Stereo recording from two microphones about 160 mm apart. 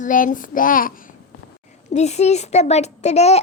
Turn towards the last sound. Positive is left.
turn(degrees=40)  # may be behind; listen again after turning